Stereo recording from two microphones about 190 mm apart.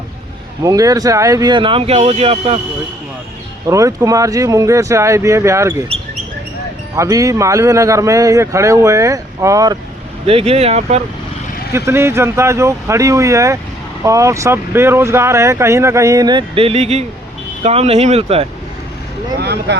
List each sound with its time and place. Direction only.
0.6 s speech: 20° right (ahead or behind)
3.7 s speech: 15° right (ahead or behind)
6.9 s speech: 15° right (ahead or behind)
10.2 s speech: 30° right (ahead or behind)
11.7 s speech: 15° right (ahead or behind); by 18.4 s 30° right (ahead or behind)
19.4 s speech: 60° right (ahead or behind)